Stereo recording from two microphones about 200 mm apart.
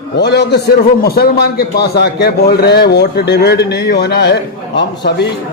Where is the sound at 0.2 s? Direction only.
55° left (ahead or behind).